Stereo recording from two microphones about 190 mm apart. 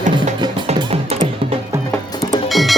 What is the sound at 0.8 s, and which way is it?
Music, 30° right (ahead or behind).